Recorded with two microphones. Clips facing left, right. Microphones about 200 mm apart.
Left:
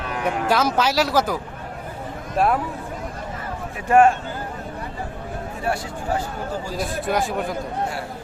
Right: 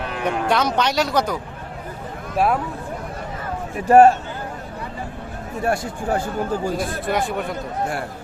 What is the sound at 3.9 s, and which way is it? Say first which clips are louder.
Speech: right 4 dB; 35° right (ahead or behind).